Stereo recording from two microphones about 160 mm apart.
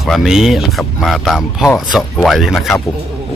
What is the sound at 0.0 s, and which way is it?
Speech, centre (ahead or behind).